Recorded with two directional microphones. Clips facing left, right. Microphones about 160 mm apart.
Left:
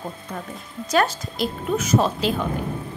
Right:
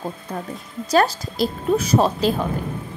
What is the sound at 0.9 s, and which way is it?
A woman's voice, 35° right (ahead or behind).